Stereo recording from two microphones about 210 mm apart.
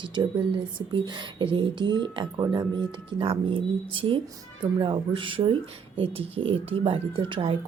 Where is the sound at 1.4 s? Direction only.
25° right (ahead or behind).